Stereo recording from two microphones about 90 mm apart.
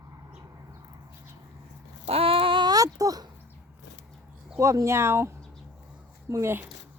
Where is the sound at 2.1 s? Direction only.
90° right; by 2.7 s 70° right (ahead or behind).